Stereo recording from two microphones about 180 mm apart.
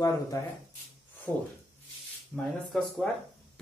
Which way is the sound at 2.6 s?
Centre (ahead or behind).